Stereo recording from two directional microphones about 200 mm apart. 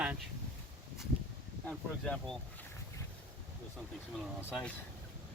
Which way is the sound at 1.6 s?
5° left (ahead or behind).